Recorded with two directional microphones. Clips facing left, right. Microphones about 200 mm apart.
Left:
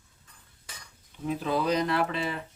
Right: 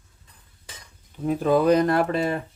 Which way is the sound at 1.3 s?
50° right (ahead or behind).